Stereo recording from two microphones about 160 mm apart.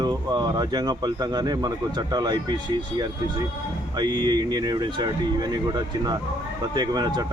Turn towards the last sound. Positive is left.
turn(degrees=-25)  # may be behind; listen again after turning